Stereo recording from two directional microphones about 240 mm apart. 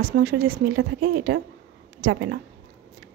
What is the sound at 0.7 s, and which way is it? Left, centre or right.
A woman's voice, right.